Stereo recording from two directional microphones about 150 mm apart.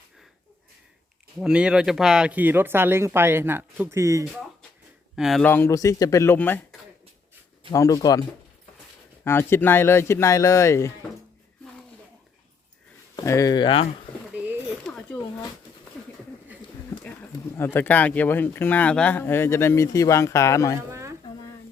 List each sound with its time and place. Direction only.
1.4 s speech: 5° right (ahead or behind)
5.1 s speech: centre (ahead or behind)
5.5 s speech: 15° left (ahead or behind)
7.7 s speech: 20° left (ahead or behind)
9.2 s speech: 15° left (ahead or behind)
13.1 s speech: 20° left (ahead or behind)
14.3 s a sound: 15° right (ahead or behind)
14.8 s a sound: 5° left (ahead or behind)
17.7 s speech: 10° left (ahead or behind)
20.9 s a sound: 20° right (ahead or behind)